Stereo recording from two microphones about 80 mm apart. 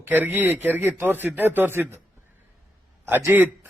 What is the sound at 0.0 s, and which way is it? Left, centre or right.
A man's voice, right.